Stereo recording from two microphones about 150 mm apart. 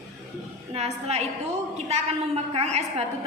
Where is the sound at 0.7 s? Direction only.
45° right (ahead or behind).